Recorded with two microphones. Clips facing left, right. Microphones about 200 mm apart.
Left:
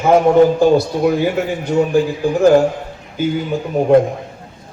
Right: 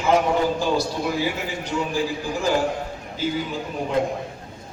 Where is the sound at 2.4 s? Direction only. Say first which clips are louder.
Left 12 dB; 50° left (ahead or behind).